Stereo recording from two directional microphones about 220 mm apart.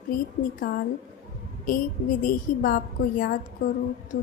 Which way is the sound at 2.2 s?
40° left (ahead or behind).